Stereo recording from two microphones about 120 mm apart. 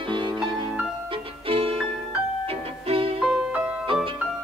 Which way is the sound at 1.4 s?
50° right (ahead or behind).